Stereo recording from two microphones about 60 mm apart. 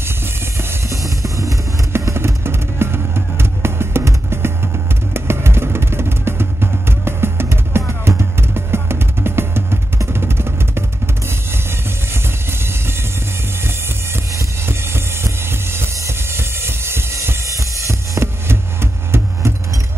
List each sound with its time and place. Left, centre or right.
0.8 s music: right
1.9 s music: right
12.1 s music: right
14.7 s music: right
16.3 s a sound: right